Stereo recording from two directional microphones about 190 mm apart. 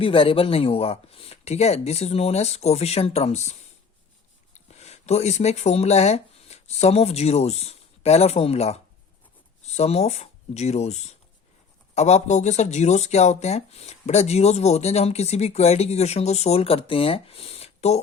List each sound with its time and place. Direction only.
0.0 s speech: 30° left (ahead or behind)
4.5 s speech: 35° left (ahead or behind)